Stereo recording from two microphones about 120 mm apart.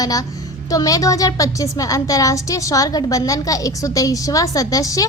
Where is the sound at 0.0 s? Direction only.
30° left (ahead or behind).